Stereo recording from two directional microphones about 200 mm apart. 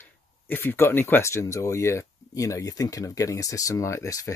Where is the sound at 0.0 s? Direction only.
10° left (ahead or behind).